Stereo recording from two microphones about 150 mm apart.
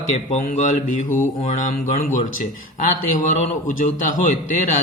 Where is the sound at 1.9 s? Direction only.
60° left (ahead or behind).